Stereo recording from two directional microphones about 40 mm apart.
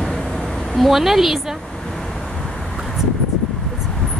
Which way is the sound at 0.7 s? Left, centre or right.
Centre.